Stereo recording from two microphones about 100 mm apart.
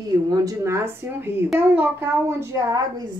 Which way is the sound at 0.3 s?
30° right (ahead or behind).